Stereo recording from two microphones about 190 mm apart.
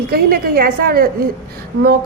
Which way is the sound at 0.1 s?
50° right (ahead or behind).